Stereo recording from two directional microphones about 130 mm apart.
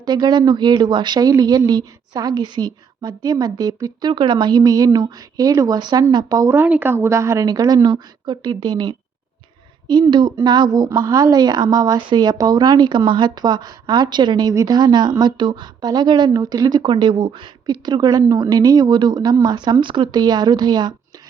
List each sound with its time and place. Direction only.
0.0 s speech: 35° right (ahead or behind)